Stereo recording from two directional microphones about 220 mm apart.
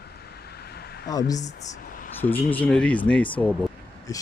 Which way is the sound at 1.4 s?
30° left (ahead or behind).